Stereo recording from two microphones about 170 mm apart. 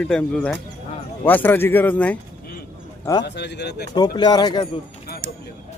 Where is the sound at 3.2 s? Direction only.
85° left.